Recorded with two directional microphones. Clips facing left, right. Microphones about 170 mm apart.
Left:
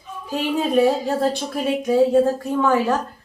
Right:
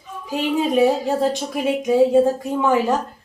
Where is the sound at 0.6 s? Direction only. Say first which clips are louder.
Even; 10° right (ahead or behind).